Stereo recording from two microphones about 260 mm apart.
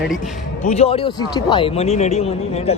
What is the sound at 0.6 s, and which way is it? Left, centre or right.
Speech, left.